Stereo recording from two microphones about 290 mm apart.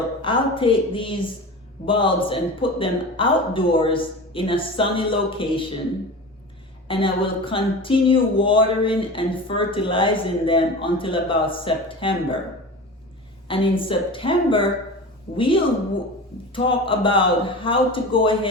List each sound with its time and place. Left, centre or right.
0.2 s a woman's voice: centre
6.8 s a woman's voice: centre
13.5 s a woman's voice: centre